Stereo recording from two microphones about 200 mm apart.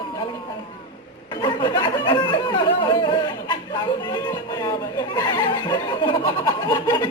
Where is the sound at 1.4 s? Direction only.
25° left (ahead or behind).